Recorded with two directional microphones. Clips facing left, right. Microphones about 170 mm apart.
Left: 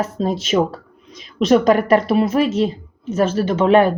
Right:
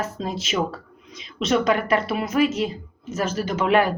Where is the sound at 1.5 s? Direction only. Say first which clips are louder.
Left 7 dB; 45° left (ahead or behind).